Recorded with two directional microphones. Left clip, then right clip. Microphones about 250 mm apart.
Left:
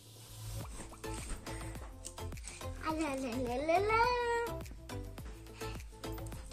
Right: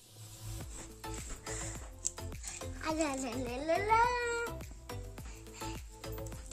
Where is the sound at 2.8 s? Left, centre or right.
Right.